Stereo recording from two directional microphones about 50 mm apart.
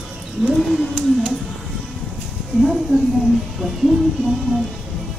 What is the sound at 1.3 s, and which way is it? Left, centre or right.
Music, centre.